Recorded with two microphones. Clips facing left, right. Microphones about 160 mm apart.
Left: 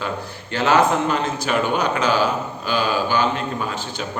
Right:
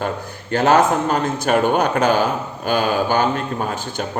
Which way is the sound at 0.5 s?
45° right (ahead or behind).